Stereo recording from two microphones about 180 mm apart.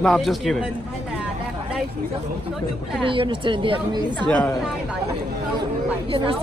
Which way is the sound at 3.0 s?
30° right (ahead or behind).